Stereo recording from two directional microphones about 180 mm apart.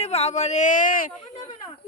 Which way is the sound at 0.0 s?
35° left (ahead or behind).